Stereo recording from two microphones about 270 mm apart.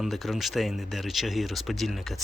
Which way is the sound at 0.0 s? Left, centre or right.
Centre.